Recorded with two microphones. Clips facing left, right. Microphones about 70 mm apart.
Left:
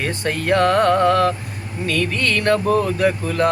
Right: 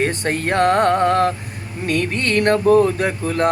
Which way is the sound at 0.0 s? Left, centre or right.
Right.